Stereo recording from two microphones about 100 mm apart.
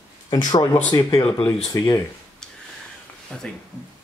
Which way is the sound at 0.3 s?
40° left (ahead or behind).